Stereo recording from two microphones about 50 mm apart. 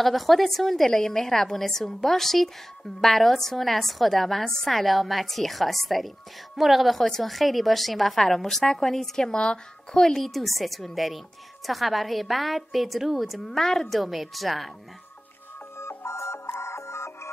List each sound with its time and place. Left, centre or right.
0.0 s a woman's voice: centre
15.8 s music: left